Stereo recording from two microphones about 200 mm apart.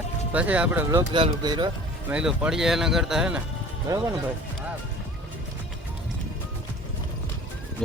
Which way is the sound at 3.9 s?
15° right (ahead or behind).